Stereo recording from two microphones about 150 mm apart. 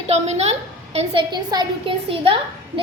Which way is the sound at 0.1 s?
45° right (ahead or behind).